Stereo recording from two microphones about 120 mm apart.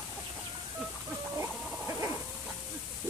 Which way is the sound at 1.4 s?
25° right (ahead or behind).